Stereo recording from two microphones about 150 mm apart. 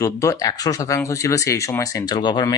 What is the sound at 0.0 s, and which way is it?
Speech, 20° left (ahead or behind).